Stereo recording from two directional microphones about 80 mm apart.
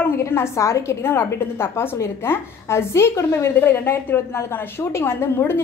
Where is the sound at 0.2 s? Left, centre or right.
Left.